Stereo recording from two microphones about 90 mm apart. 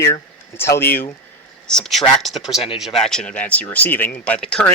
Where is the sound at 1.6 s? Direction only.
10° left (ahead or behind).